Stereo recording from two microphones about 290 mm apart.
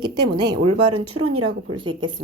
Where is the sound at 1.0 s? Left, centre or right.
Right.